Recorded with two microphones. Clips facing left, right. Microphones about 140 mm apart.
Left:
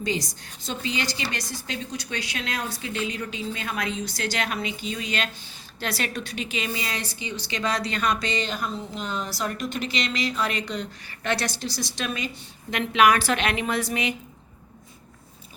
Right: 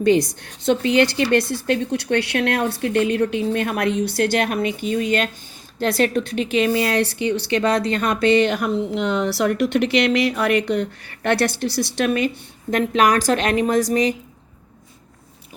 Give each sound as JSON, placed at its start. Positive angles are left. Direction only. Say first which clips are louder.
{"t": 0.0, "sound": "a woman's voice", "louder": "right 12 dB", "side_deg": -55}
{"t": 12.7, "sound": "a woman's voice", "louder": "right 3 dB", "side_deg": -40}